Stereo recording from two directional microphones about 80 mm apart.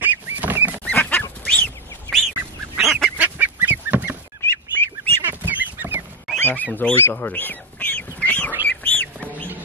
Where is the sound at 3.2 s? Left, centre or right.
Right.